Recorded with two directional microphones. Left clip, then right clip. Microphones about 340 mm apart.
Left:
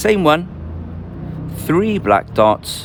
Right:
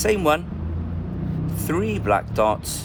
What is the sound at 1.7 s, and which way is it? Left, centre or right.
Speech, left.